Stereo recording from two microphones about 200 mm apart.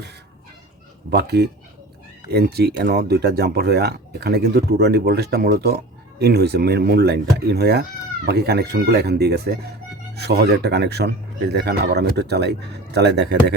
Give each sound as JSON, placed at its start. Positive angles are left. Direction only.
{"t": 1.1, "sound": "speech", "side_deg": -55}